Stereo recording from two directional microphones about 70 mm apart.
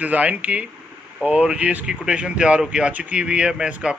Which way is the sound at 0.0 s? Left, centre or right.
Right.